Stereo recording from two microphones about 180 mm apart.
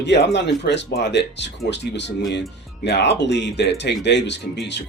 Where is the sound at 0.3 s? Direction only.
75° left (ahead or behind).